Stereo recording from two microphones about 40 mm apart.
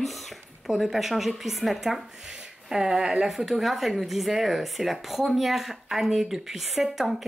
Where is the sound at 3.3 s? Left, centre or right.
Centre.